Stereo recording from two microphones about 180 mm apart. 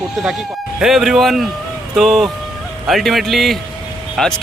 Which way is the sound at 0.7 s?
Centre (ahead or behind).